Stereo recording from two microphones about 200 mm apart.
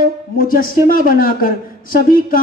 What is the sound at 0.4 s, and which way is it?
Speech, 45° left (ahead or behind).